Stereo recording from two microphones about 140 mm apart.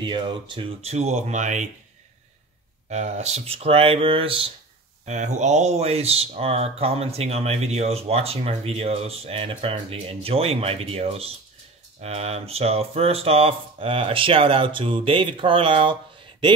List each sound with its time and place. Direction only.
0.0 s speech: 35° right (ahead or behind)
0.9 s speech: 55° right (ahead or behind)
2.9 s speech: 55° right (ahead or behind)
5.0 s speech: 55° right (ahead or behind); by 16.5 s 35° right (ahead or behind)